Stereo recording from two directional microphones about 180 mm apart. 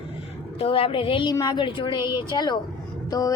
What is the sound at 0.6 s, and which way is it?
A woman's voice, 30° left (ahead or behind).